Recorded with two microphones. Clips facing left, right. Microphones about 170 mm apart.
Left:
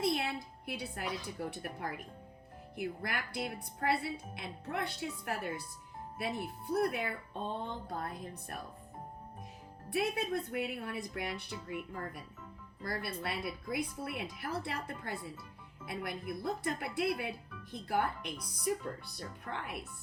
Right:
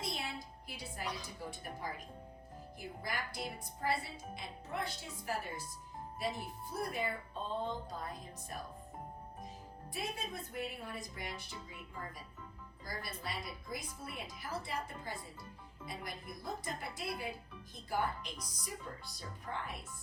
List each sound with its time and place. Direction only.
0.0 s a sound: 65° left (ahead or behind)
1.4 s speech: 60° left (ahead or behind)
9.9 s speech: 65° left (ahead or behind)